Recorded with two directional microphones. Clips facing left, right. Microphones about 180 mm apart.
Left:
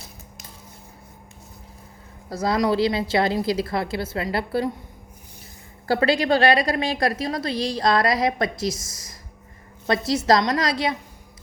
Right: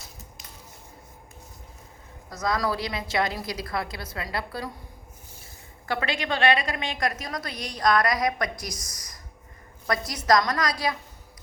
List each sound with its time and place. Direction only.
2.3 s a woman's voice: 30° left (ahead or behind)
5.9 s a woman's voice: 35° left (ahead or behind)